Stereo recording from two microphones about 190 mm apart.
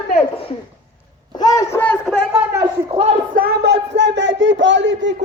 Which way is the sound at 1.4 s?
20° left (ahead or behind).